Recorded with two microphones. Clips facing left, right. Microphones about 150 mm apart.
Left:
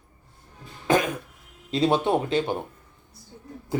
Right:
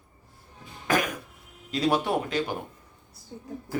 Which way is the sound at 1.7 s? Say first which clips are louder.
Left 3 dB; 25° left (ahead or behind).